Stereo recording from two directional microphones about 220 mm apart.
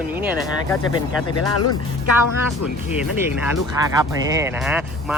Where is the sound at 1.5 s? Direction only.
90° left.